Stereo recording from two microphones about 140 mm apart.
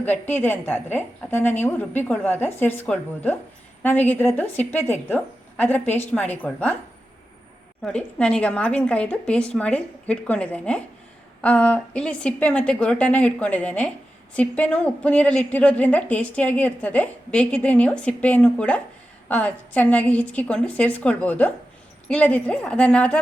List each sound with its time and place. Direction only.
0.0 s a woman's voice: 15° left (ahead or behind)
7.8 s a woman's voice: 5° left (ahead or behind)